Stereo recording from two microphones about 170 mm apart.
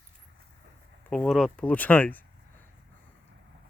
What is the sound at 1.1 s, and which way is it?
Speech, 5° left (ahead or behind).